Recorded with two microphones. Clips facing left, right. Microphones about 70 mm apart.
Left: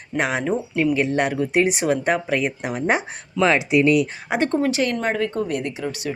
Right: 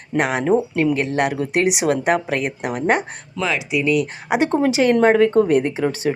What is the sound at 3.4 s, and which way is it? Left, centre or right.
Speech, left.